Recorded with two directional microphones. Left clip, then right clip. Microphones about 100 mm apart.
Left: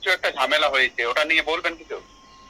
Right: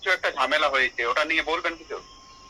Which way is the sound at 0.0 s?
20° left (ahead or behind).